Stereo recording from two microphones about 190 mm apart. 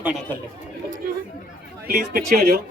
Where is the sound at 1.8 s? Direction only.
55° right (ahead or behind).